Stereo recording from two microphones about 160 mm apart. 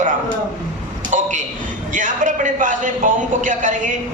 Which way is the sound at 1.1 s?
50° right (ahead or behind).